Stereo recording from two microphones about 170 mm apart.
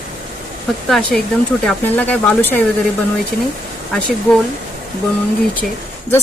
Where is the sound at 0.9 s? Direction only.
Centre (ahead or behind).